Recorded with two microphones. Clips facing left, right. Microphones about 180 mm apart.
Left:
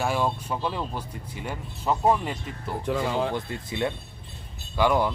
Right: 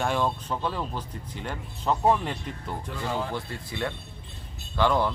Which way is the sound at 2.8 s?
70° left (ahead or behind).